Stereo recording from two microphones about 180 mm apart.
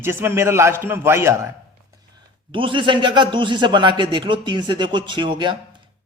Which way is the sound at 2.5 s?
30° right (ahead or behind).